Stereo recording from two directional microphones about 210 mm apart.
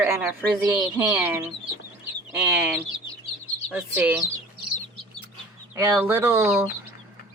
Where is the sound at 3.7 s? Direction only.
5° right (ahead or behind).